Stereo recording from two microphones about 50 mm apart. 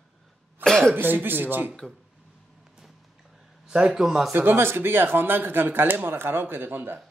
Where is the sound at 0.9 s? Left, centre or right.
Right.